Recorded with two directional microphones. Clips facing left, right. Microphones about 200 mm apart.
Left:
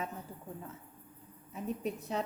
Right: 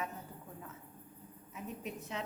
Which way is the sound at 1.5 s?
35° left (ahead or behind).